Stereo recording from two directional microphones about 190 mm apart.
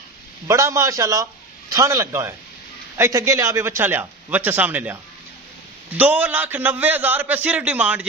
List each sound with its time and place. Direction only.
0.5 s a man's voice: 15° right (ahead or behind)
5.9 s a man's voice: 10° right (ahead or behind)